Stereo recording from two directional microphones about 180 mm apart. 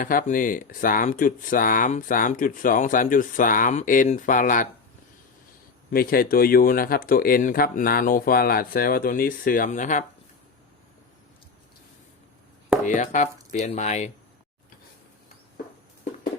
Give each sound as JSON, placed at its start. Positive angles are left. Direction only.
{"t": 0.0, "sound": "speech", "side_deg": 50}
{"t": 5.9, "sound": "speech", "side_deg": 55}
{"t": 12.8, "sound": "speech", "side_deg": 45}